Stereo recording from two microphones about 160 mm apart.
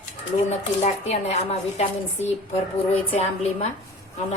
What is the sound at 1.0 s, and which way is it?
Speech, 40° left (ahead or behind).